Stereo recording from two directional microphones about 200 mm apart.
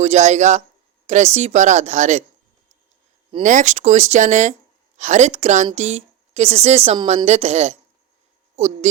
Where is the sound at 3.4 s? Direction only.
35° right (ahead or behind).